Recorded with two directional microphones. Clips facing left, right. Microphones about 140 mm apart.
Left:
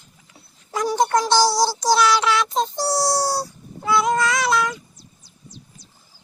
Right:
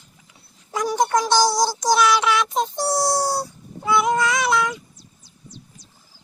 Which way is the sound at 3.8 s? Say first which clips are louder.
Even; 20° right (ahead or behind).